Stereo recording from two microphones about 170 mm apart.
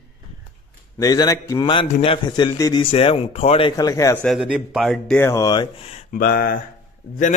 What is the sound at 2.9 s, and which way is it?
Speech, 35° left (ahead or behind).